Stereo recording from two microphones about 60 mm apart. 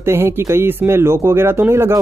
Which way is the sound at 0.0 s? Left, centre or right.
Right.